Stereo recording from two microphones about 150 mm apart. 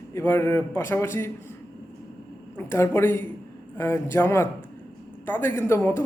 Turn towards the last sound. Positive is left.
turn(degrees=15)  # may be behind; listen again after turning